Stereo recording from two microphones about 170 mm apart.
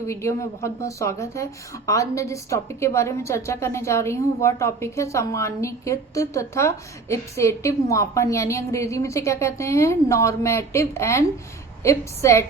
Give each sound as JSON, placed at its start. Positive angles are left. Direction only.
{"t": 0.1, "sound": "a woman's voice", "side_deg": 15}